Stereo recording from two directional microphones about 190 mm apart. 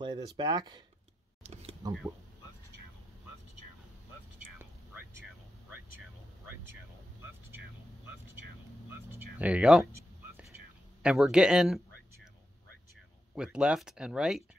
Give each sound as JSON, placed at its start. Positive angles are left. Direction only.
{"t": 0.0, "sound": "speech", "side_deg": -25}
{"t": 1.4, "sound": "speech", "side_deg": -35}
{"t": 9.1, "sound": "speech", "side_deg": -5}
{"t": 11.0, "sound": "speech", "side_deg": -5}
{"t": 13.3, "sound": "speech", "side_deg": -5}